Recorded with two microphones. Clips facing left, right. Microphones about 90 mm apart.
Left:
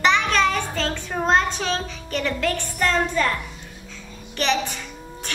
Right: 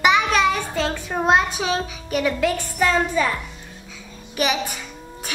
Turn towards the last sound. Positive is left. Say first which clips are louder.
# even
turn(degrees=-10)  # may be behind; listen again after turning